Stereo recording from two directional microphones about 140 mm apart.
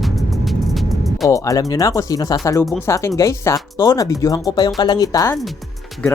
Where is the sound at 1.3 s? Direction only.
25° left (ahead or behind).